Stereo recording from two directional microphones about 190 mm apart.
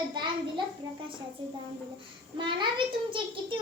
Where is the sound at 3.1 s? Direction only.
25° right (ahead or behind).